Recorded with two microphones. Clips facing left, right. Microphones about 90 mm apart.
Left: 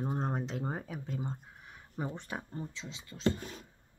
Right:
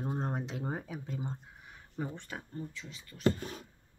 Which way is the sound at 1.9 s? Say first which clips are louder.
Left 1 dB; 15° left (ahead or behind).